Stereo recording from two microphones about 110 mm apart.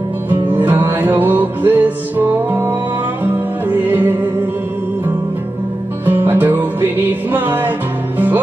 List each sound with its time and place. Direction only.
0.3 s music: 20° right (ahead or behind)
6.0 s music: 20° right (ahead or behind)